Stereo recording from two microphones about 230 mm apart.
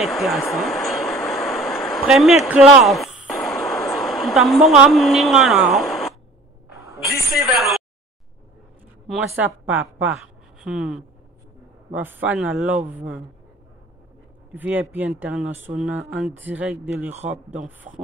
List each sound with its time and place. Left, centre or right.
0.0 s speech: centre
0.5 s a sound: centre
7.4 s speech: centre
9.4 s speech: centre
14.5 s speech: centre
17.9 s speech: right